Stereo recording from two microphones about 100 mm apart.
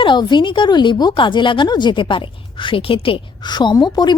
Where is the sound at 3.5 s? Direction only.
50° left (ahead or behind).